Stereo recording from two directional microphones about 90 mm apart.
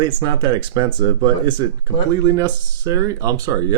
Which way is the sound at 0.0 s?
50° right (ahead or behind).